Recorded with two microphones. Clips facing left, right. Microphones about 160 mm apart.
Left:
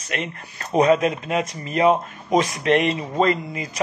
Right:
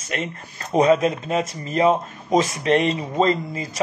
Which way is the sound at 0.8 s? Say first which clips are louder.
Even; 30° right (ahead or behind).